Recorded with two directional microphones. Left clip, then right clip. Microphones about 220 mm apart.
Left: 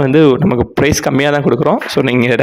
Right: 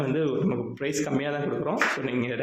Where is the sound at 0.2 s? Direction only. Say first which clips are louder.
Left 16 dB; 45° left (ahead or behind).